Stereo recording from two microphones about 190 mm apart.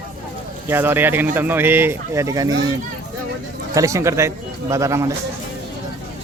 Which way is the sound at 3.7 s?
15° right (ahead or behind).